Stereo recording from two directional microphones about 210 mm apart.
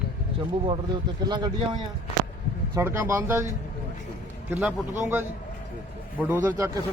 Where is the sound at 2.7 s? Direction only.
10° right (ahead or behind).